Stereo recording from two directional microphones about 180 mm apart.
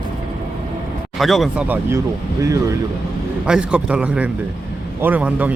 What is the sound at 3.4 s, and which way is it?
Speech, 5° right (ahead or behind).